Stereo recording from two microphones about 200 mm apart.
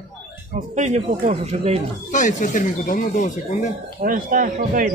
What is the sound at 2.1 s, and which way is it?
Speech, 40° left (ahead or behind).